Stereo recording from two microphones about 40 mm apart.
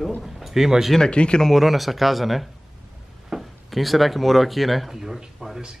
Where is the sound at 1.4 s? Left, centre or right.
Centre.